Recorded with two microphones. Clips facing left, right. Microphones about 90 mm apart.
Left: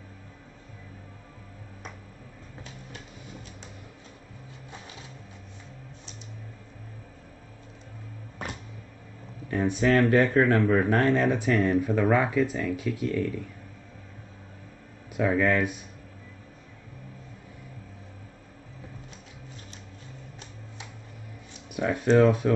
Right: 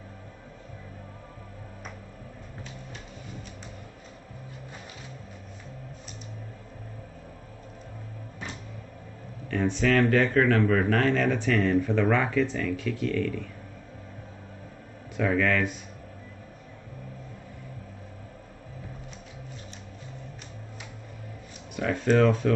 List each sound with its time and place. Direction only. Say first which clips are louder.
9.5 s speech: left 1 dB; 20° left (ahead or behind)
15.1 s speech: left 1 dB; 15° left (ahead or behind)
21.7 s speech: left 2 dB; 15° left (ahead or behind)